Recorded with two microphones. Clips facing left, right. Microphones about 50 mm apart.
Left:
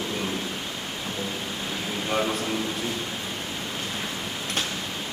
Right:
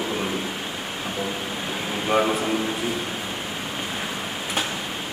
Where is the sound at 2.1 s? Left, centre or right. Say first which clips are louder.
Right 6 dB; centre.